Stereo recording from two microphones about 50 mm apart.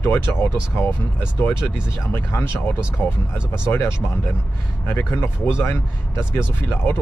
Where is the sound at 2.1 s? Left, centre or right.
Left.